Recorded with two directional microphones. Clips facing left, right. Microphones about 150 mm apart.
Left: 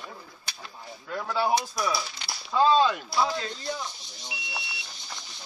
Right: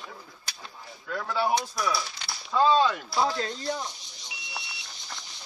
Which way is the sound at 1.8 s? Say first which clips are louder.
Even; 5° left (ahead or behind).